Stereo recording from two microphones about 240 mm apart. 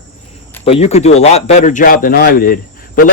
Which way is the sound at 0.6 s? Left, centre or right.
Left.